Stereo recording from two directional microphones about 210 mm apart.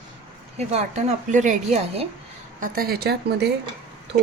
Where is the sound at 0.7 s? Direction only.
30° right (ahead or behind); by 3.5 s 50° right (ahead or behind).